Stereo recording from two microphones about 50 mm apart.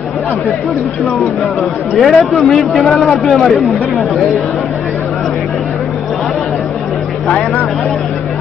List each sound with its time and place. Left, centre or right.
2.0 s a man's voice: centre
3.3 s speech: centre